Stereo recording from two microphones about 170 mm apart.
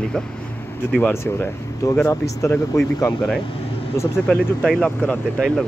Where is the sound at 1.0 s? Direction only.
15° left (ahead or behind).